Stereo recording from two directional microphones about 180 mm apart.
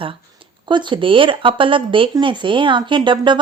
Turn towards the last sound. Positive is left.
turn(degrees=-25)  # may be behind; listen again after turning